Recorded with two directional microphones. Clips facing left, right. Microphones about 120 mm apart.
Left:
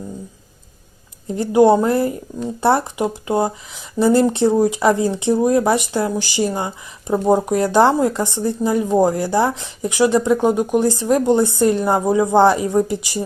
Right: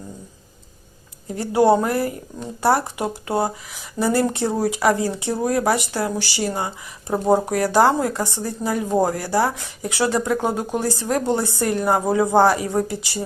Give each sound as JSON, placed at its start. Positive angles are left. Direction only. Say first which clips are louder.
{"t": 1.3, "sound": "speech", "louder": "left 4 dB", "side_deg": 20}
{"t": 7.1, "sound": "speech", "louder": "left 2 dB", "side_deg": -20}
{"t": 7.5, "sound": "speech", "louder": "left 2 dB", "side_deg": 25}